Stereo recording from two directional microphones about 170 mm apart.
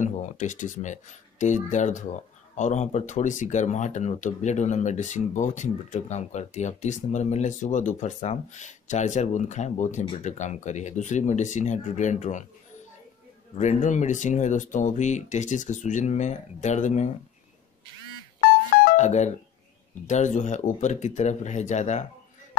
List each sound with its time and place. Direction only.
0.0 s speech: 45° left (ahead or behind)
13.6 s speech: 45° left (ahead or behind)
18.9 s speech: 45° left (ahead or behind)